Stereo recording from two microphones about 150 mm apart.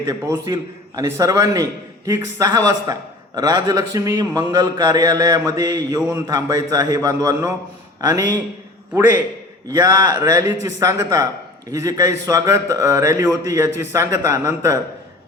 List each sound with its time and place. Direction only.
0.0 s a man's voice: 20° right (ahead or behind)
9.6 s a man's voice: 25° right (ahead or behind)